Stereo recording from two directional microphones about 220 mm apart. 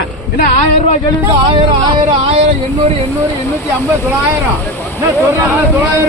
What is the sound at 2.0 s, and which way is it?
Speech, 25° right (ahead or behind).